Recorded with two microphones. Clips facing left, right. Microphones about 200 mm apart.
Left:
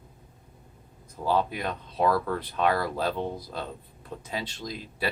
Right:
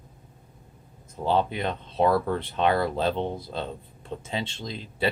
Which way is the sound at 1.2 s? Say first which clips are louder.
Right 2 dB; 25° right (ahead or behind).